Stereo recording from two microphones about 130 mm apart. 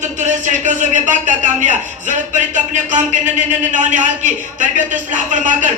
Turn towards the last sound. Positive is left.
turn(degrees=-75)  # may be behind; listen again after turning